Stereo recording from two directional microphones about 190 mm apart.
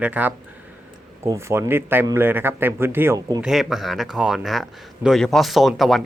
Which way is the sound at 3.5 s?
Centre (ahead or behind).